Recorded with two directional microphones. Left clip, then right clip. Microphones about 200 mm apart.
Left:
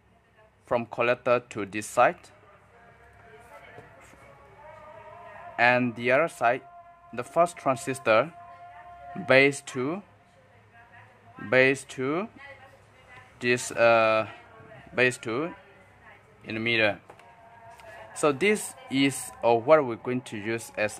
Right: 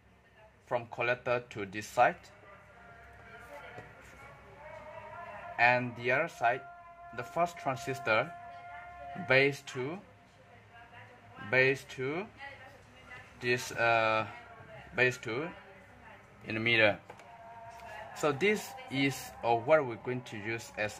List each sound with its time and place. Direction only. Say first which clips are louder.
0.7 s speech: left 7 dB; 30° left (ahead or behind)
5.6 s speech: left 5 dB; 25° left (ahead or behind)
11.5 s speech: left 6 dB; 30° left (ahead or behind)
13.4 s speech: left 8 dB; 30° left (ahead or behind)
16.4 s speech: left 2 dB; 10° left (ahead or behind)
18.1 s speech: left 6 dB; 25° left (ahead or behind)